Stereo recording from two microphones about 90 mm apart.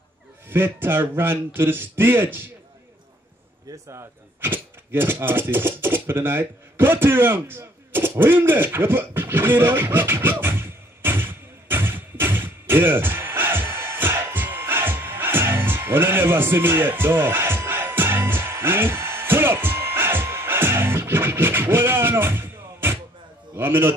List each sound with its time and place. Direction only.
0.5 s a man's voice: 25° right (ahead or behind)
4.4 s speech: 25° right (ahead or behind)
10.4 s a sound: 25° right (ahead or behind)